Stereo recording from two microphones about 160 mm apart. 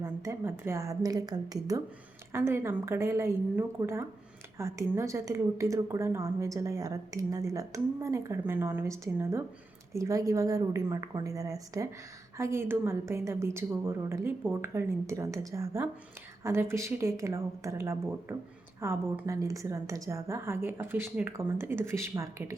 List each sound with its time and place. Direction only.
0.0 s a woman's voice: 15° right (ahead or behind)